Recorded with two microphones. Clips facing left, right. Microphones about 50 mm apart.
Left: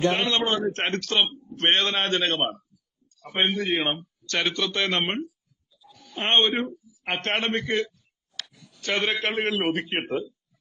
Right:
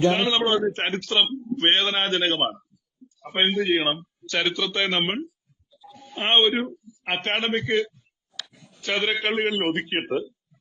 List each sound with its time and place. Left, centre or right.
0.1 s a man's voice: centre
3.3 s speech: right
3.6 s a man's voice: centre
5.9 s music: right
6.2 s a man's voice: centre
8.5 s a sound: right
8.8 s a man's voice: centre